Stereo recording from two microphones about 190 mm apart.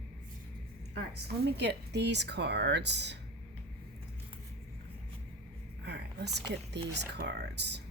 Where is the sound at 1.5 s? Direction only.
60° right (ahead or behind).